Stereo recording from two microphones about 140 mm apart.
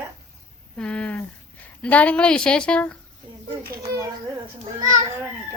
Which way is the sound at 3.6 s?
90° right.